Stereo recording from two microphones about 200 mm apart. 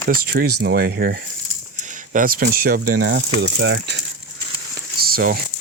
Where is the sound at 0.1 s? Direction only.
50° right (ahead or behind).